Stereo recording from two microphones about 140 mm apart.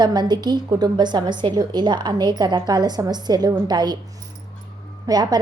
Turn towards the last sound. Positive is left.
turn(degrees=-30)  # may be behind; listen again after turning